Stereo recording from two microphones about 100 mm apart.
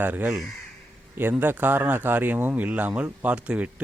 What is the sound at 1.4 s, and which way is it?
Speech, 20° right (ahead or behind).